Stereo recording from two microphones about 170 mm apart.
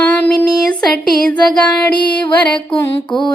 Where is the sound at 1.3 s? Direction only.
5° left (ahead or behind).